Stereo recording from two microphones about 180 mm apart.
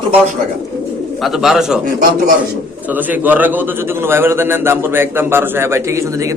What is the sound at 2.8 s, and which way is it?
A man's voice, 10° right (ahead or behind).